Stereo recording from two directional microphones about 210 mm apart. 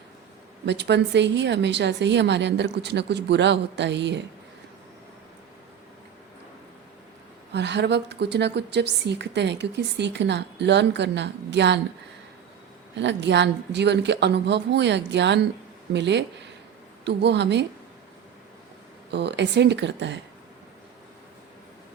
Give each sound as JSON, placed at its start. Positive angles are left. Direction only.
{"t": 0.6, "sound": "a woman's voice", "side_deg": -55}
{"t": 7.5, "sound": "a woman's voice", "side_deg": -55}
{"t": 13.0, "sound": "a woman's voice", "side_deg": -55}
{"t": 19.1, "sound": "a woman's voice", "side_deg": -55}